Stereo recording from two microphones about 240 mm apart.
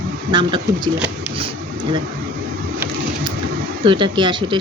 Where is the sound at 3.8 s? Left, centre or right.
Centre.